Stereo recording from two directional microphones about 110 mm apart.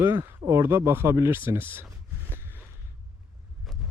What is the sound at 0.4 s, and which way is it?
Speech, 25° right (ahead or behind).